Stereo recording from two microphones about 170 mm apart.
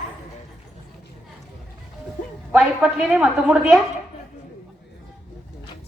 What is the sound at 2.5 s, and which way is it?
A woman's voice, 5° right (ahead or behind).